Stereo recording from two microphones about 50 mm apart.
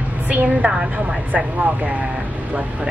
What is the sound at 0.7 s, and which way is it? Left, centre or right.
Speech, centre.